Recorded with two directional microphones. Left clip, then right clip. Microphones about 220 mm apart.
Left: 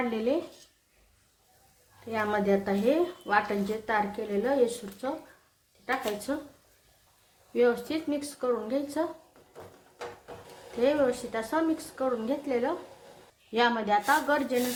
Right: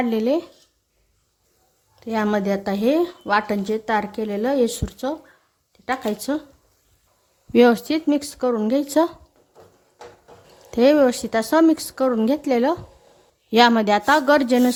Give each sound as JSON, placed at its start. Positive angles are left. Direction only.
{"t": 0.1, "sound": "speech", "side_deg": -40}
{"t": 2.0, "sound": "speech", "side_deg": -50}
{"t": 7.5, "sound": "speech", "side_deg": -50}
{"t": 10.8, "sound": "speech", "side_deg": -50}